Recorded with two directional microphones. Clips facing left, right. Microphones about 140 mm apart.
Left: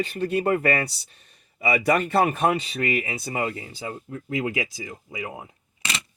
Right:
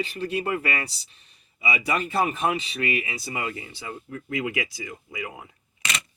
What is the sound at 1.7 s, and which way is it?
Speech, 60° left (ahead or behind).